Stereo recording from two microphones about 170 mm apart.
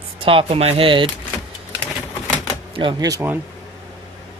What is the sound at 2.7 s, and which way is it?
Speech, 30° right (ahead or behind).